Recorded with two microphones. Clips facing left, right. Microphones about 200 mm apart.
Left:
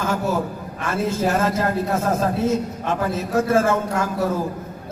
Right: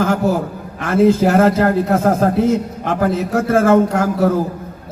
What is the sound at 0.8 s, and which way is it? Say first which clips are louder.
A man's voice: right 10 dB; 60° right (ahead or behind).